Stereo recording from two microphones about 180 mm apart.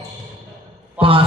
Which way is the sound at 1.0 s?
30° right (ahead or behind).